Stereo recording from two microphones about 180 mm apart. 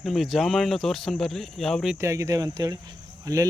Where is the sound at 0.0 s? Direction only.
Centre (ahead or behind).